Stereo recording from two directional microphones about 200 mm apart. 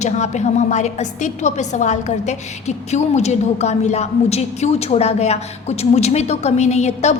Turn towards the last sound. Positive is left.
turn(degrees=35)  # may be behind; listen again after turning